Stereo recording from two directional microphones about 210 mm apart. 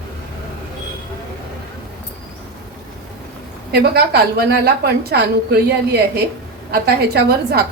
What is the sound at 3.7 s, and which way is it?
A woman's voice, 50° right (ahead or behind).